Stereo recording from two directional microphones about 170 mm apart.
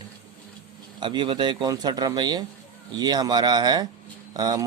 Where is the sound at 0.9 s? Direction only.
25° right (ahead or behind).